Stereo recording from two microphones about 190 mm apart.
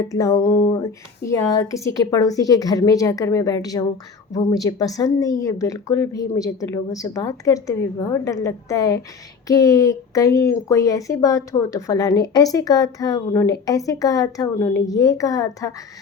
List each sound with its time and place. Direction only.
0.0 s speech: 15° left (ahead or behind)